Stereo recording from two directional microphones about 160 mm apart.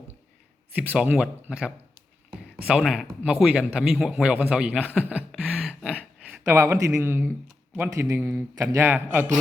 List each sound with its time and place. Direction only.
0.8 s speech: 5° right (ahead or behind)
5.0 s a sound: 5° right (ahead or behind)
6.5 s speech: 15° right (ahead or behind)